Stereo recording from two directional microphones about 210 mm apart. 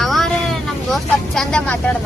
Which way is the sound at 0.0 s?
Centre (ahead or behind).